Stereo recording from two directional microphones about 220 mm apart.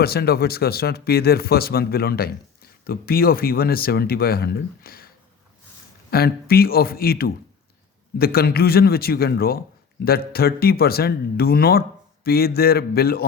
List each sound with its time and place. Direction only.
0.0 s speech: 45° left (ahead or behind)